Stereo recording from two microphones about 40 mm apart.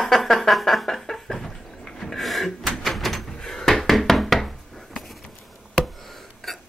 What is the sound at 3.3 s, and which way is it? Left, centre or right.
Knock, centre.